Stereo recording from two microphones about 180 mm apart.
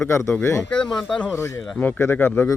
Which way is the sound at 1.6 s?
5° left (ahead or behind).